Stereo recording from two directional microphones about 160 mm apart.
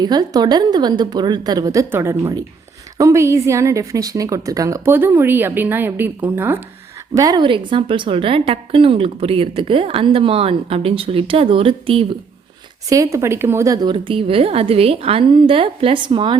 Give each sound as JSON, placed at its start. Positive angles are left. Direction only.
{"t": 0.0, "sound": "a woman's voice", "side_deg": -25}
{"t": 12.9, "sound": "a woman's voice", "side_deg": -20}
{"t": 13.9, "sound": "a woman's voice", "side_deg": -35}